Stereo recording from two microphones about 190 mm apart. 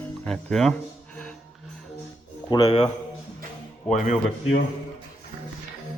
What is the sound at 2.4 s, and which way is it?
Speech, 25° left (ahead or behind).